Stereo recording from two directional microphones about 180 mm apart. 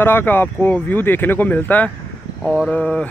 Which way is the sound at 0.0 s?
10° left (ahead or behind).